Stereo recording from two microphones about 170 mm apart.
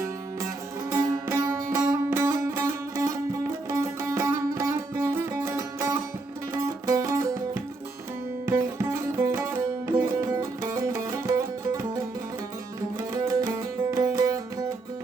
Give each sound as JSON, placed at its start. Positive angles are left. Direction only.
{"t": 0.9, "sound": "music", "side_deg": -15}
{"t": 13.9, "sound": "music", "side_deg": -20}